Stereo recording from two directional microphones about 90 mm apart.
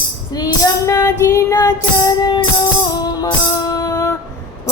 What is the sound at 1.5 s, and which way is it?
Child singing, 50° left (ahead or behind).